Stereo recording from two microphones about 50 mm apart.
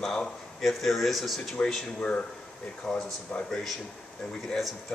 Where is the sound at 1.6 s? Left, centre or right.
Centre.